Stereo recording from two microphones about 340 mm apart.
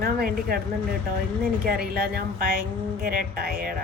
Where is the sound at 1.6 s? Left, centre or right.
Right.